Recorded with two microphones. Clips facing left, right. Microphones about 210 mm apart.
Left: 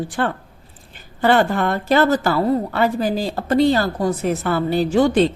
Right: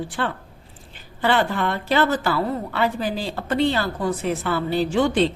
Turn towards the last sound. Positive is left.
turn(degrees=40)  # may be behind; listen again after turning